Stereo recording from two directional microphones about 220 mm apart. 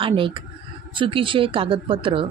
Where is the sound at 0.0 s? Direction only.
25° right (ahead or behind).